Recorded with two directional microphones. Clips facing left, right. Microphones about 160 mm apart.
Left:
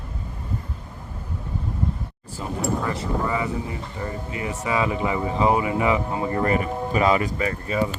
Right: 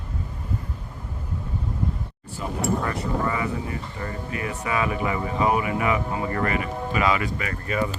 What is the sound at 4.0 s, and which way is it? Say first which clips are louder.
Speech: left 2 dB; 20° left (ahead or behind).